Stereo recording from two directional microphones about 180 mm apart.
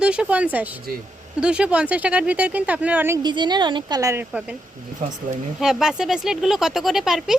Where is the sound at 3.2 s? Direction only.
25° right (ahead or behind); by 4.5 s 5° right (ahead or behind).